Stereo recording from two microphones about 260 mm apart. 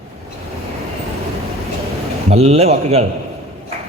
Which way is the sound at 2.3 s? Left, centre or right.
Right.